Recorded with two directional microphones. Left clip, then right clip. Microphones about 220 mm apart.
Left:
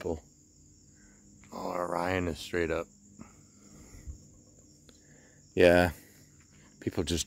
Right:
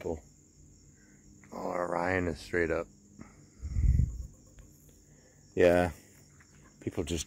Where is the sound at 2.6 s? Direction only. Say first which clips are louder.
Right 1 dB; 15° left (ahead or behind).